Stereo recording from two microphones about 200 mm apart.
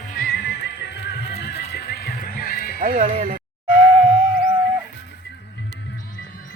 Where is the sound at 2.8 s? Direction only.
40° right (ahead or behind).